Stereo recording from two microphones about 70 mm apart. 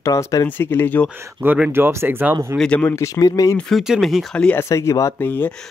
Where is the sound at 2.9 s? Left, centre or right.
Left.